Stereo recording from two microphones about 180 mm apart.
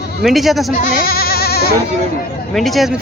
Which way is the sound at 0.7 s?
55° left (ahead or behind).